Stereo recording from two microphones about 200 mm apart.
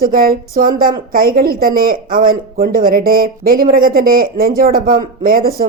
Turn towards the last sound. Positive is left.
turn(degrees=-45)  # may be behind; listen again after turning